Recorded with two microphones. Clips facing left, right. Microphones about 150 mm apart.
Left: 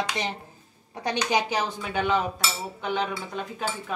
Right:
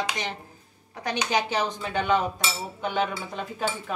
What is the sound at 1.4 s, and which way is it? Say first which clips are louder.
Speech: even; 10° left (ahead or behind).